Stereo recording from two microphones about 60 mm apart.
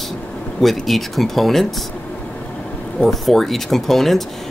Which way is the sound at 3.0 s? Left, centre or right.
Centre.